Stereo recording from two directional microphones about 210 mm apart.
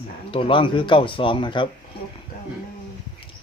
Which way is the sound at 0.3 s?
25° left (ahead or behind).